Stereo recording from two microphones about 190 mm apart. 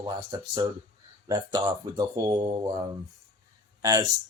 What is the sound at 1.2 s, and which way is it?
Speech, 20° right (ahead or behind).